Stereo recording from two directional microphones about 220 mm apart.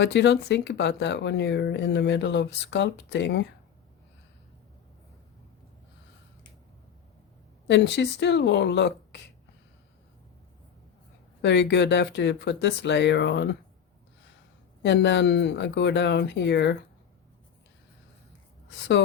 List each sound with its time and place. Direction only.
0.0 s speech: 50° left (ahead or behind)
7.7 s speech: 50° left (ahead or behind)
11.4 s speech: 50° left (ahead or behind)
14.8 s speech: 50° left (ahead or behind)